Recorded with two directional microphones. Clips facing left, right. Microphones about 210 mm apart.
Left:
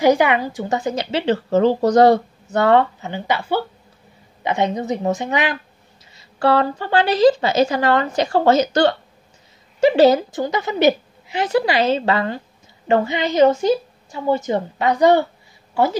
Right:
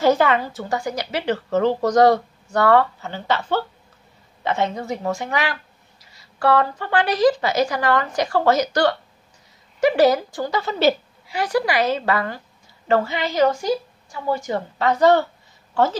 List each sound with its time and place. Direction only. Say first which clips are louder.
0.0 s a woman's voice: left 2 dB; 15° left (ahead or behind)